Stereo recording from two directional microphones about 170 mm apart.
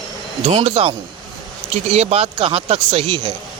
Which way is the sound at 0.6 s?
35° right (ahead or behind).